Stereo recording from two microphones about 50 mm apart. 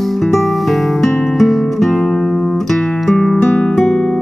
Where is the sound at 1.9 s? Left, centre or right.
Centre.